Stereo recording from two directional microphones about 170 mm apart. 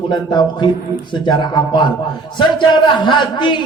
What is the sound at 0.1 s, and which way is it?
A man's voice, 25° left (ahead or behind).